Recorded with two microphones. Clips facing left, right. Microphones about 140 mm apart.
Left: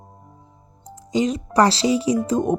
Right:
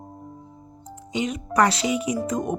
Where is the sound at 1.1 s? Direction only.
35° left (ahead or behind).